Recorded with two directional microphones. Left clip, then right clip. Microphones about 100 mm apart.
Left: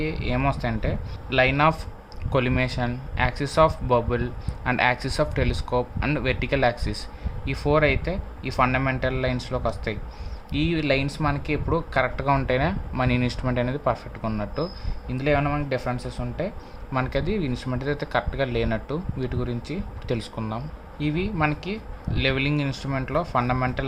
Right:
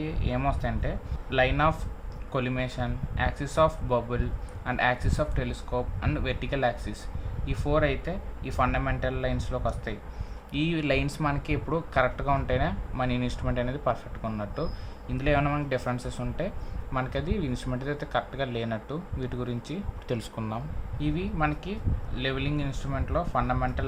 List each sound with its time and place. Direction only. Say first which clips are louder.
0.0 s speech: left 4 dB; 50° left (ahead or behind)
2.3 s speech: left 7 dB; 55° left (ahead or behind)
10.5 s speech: left 4 dB; 25° left (ahead or behind)
15.2 s speech: left 3 dB; 25° left (ahead or behind)
15.4 s speech: left 3 dB; 15° left (ahead or behind)
16.9 s speech: left 5 dB; 35° left (ahead or behind)
18.0 s speech: left 4 dB; 40° left (ahead or behind); by 20.7 s 15° left (ahead or behind)
21.0 s speech: left 4 dB; 40° left (ahead or behind)